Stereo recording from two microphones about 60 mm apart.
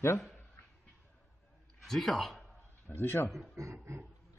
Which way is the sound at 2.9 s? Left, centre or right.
Left.